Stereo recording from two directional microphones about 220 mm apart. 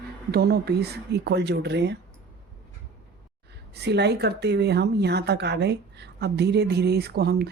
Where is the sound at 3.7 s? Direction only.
50° right (ahead or behind).